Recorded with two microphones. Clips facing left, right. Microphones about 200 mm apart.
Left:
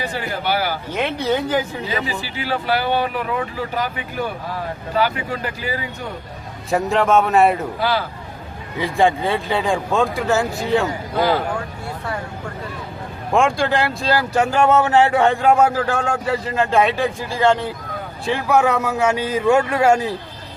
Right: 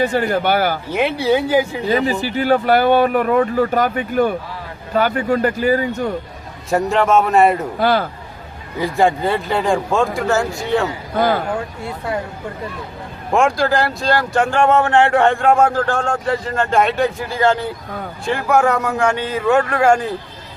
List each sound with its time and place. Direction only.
0.0 s speech: 50° right (ahead or behind)
0.9 s speech: 10° right (ahead or behind)
1.9 s speech: 50° right (ahead or behind)
6.7 s speech: centre (ahead or behind)
7.8 s speech: 50° right (ahead or behind)
8.8 s speech: centre (ahead or behind)
13.3 s speech: centre (ahead or behind)